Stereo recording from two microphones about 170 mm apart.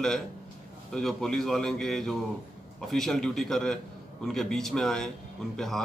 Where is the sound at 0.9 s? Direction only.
5° left (ahead or behind).